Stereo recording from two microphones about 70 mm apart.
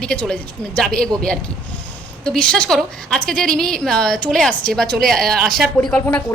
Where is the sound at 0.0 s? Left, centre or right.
Centre.